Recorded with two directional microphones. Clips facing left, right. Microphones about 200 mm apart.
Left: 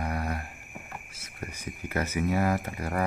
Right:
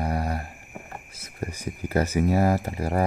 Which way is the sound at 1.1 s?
35° right (ahead or behind).